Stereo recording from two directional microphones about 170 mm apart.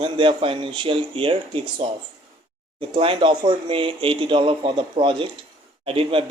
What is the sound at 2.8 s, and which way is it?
Speech, 30° right (ahead or behind).